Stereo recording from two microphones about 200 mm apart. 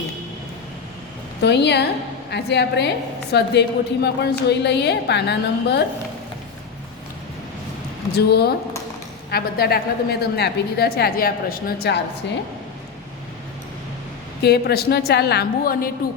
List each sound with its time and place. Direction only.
1.4 s a woman's voice: 60° left (ahead or behind)
8.1 s a woman's voice: 55° left (ahead or behind)
14.4 s a woman's voice: 50° left (ahead or behind)